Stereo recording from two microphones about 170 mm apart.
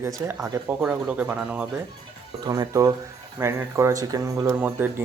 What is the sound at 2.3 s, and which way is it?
Speech, 20° right (ahead or behind).